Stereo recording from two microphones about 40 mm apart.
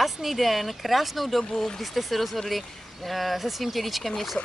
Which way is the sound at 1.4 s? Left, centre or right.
Centre.